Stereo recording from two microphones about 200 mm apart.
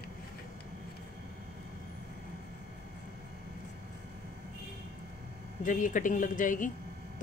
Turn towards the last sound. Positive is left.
turn(degrees=40)  # may be behind; listen again after turning